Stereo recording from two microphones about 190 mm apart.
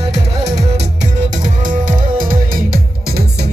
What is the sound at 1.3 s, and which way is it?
Music, 45° right (ahead or behind).